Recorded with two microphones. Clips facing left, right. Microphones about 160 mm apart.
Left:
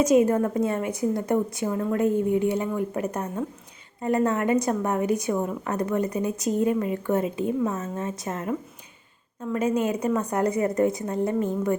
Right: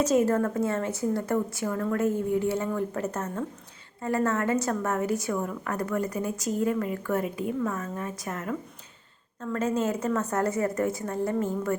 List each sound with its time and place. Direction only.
0.0 s a woman's voice: 15° left (ahead or behind)